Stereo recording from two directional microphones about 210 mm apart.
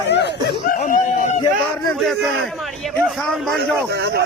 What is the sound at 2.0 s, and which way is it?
Speech, centre (ahead or behind).